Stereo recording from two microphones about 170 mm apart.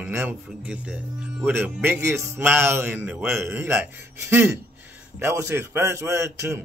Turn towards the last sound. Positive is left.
turn(degrees=-15)  # may be behind; listen again after turning